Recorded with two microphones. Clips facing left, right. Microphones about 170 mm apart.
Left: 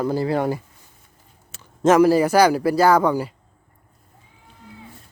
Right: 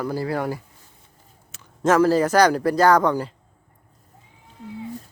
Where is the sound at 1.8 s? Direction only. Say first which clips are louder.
Left 3 dB; 15° left (ahead or behind).